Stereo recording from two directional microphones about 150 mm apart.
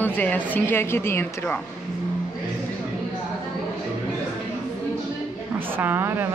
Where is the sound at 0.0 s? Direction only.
10° left (ahead or behind).